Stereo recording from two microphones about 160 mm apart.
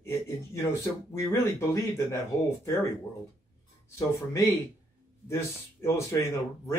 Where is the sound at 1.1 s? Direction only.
15° left (ahead or behind).